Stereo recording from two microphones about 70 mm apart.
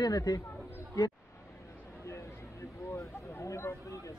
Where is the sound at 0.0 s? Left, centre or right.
Left.